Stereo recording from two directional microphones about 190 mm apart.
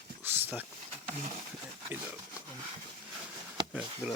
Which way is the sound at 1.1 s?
35° right (ahead or behind).